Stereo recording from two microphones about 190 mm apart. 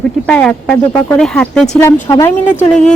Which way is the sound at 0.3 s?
5° left (ahead or behind).